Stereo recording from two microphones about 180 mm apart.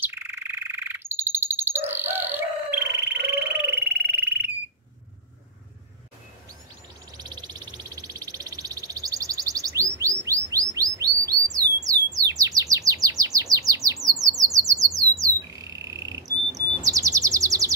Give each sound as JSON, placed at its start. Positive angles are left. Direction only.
{"t": 0.0, "sound": "frog", "side_deg": -15}
{"t": 7.2, "sound": "a sound", "side_deg": -25}
{"t": 14.0, "sound": "squawk", "side_deg": -20}
{"t": 16.3, "sound": "bird", "side_deg": -20}